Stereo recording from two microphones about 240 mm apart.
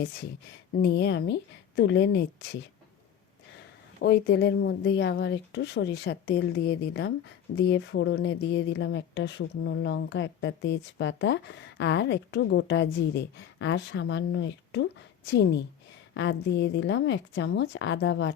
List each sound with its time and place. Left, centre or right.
0.8 s speech: left
4.0 s speech: left